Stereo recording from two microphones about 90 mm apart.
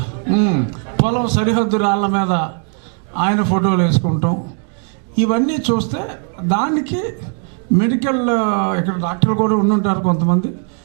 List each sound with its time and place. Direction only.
0.0 s a man's voice: 15° right (ahead or behind)